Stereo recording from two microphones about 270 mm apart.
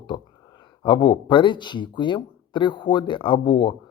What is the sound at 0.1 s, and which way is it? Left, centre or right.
Speech, centre.